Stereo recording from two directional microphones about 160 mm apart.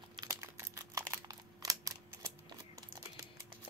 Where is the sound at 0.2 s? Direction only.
20° right (ahead or behind).